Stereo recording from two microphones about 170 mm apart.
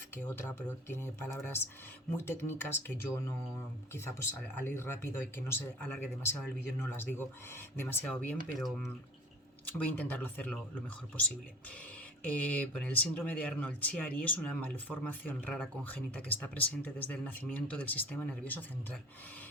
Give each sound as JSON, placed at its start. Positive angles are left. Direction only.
{"t": 0.2, "sound": "speech", "side_deg": 10}
{"t": 8.5, "sound": "speech", "side_deg": 0}
{"t": 12.2, "sound": "speech", "side_deg": 5}